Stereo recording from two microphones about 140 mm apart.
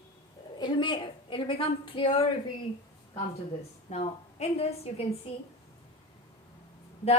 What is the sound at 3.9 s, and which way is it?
A woman's voice, 50° left (ahead or behind).